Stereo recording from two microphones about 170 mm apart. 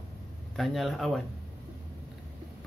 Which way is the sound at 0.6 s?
Centre (ahead or behind).